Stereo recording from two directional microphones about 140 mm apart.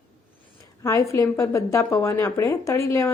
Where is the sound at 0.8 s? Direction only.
25° left (ahead or behind).